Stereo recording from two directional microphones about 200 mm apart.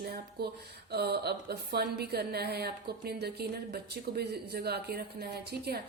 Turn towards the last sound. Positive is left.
turn(degrees=-55)  # may be behind; listen again after turning